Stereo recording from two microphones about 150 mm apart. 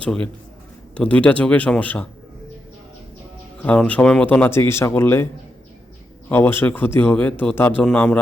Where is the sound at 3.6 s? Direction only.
10° left (ahead or behind).